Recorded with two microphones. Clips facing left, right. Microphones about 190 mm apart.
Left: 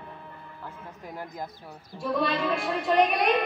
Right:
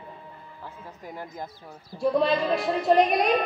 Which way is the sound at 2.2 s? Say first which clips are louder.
Right 3 dB; 35° right (ahead or behind).